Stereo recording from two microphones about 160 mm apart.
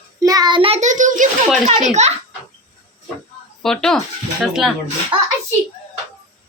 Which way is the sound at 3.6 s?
5° left (ahead or behind).